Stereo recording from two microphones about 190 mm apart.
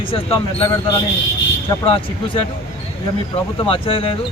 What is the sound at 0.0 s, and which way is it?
Speech, 25° left (ahead or behind).